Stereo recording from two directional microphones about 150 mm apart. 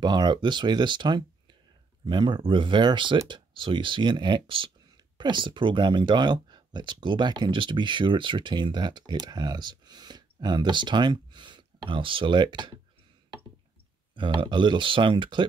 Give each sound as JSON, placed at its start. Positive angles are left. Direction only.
{"t": 0.0, "sound": "speech", "side_deg": -30}
{"t": 14.1, "sound": "speech", "side_deg": -35}